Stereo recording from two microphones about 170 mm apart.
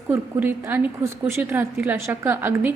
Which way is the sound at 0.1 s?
15° right (ahead or behind).